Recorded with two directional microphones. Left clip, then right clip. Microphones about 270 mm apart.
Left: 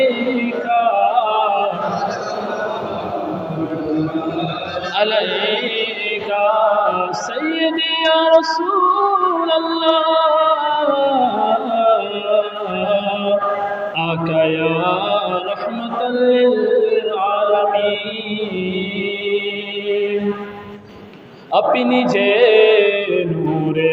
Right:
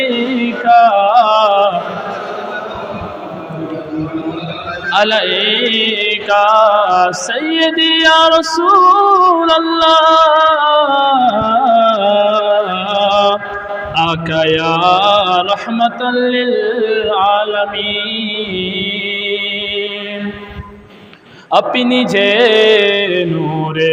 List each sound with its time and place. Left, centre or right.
0.0 s music: right
4.9 s chant: right
13.9 s mantra: right
21.5 s mantra: right